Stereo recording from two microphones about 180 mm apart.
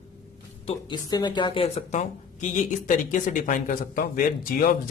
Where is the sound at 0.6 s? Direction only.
30° left (ahead or behind).